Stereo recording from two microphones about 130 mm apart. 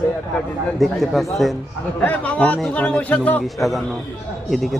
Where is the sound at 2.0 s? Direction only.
10° left (ahead or behind).